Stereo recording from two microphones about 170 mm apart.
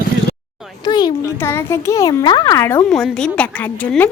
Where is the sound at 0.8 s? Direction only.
25° left (ahead or behind).